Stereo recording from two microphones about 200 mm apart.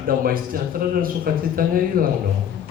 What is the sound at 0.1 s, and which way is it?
A man's voice, 45° right (ahead or behind).